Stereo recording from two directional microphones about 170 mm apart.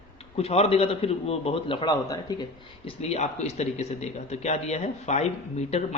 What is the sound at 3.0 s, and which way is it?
Speech, 40° left (ahead or behind).